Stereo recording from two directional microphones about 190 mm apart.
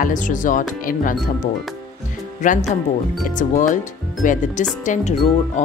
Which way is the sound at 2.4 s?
40° left (ahead or behind).